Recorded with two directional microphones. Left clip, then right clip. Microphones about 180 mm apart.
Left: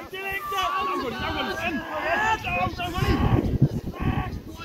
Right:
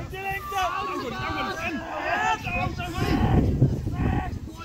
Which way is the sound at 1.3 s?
50° left (ahead or behind).